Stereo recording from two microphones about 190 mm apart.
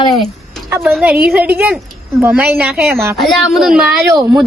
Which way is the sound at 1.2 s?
10° right (ahead or behind).